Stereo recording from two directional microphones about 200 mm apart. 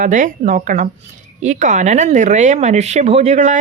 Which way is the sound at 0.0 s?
40° right (ahead or behind).